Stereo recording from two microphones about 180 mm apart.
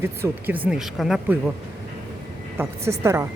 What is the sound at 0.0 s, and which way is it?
A woman's voice, 10° right (ahead or behind).